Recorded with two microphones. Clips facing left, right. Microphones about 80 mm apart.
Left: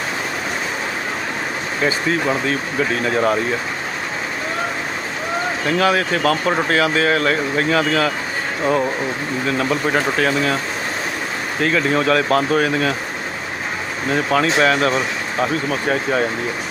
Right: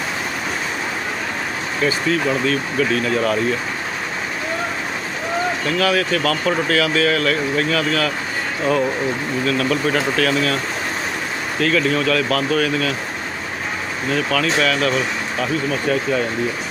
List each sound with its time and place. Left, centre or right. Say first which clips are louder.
1.8 s speech: even; left
5.6 s speech: left 3 dB; left
9.5 s speech: even; left
11.6 s speech: left 1 dB; left
14.1 s speech: left 2 dB; left